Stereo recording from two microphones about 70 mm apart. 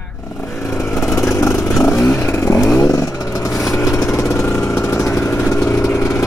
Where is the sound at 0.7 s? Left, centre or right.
Left.